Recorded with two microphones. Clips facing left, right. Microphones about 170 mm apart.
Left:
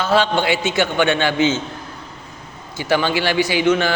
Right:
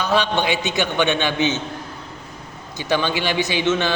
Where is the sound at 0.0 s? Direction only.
15° right (ahead or behind).